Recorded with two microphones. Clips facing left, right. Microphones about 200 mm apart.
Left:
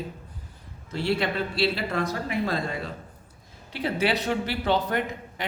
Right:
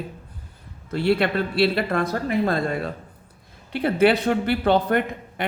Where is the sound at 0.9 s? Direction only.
60° right (ahead or behind).